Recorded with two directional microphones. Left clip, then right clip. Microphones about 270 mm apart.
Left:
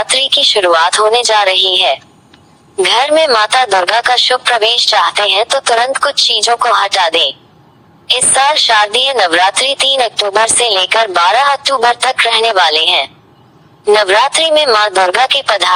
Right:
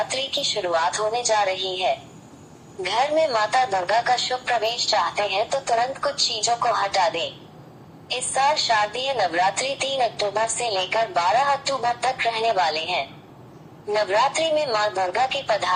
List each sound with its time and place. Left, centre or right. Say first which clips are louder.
0.0 s a woman's voice: left 14 dB; left